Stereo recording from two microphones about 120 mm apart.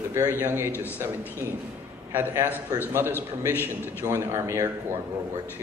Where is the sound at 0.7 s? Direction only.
20° left (ahead or behind).